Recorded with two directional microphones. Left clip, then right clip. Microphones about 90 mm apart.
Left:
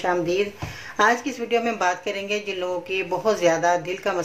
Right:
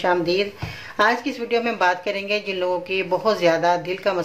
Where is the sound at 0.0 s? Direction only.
20° right (ahead or behind).